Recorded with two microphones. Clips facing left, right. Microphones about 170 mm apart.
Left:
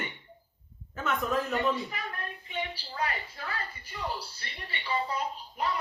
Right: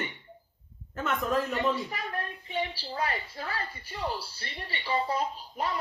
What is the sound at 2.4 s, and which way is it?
A woman's voice, 40° right (ahead or behind).